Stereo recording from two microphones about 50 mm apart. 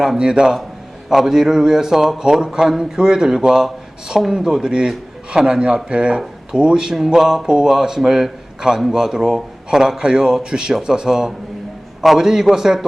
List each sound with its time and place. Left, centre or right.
0.2 s a man's voice: centre